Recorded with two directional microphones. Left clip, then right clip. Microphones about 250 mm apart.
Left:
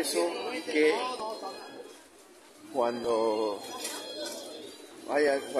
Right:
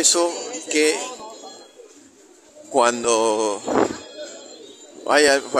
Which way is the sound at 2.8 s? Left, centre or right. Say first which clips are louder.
Right 10 dB; right.